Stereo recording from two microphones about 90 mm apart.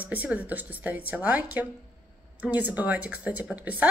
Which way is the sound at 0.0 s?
15° right (ahead or behind).